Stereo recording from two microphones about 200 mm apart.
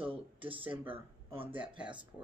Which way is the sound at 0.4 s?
25° right (ahead or behind).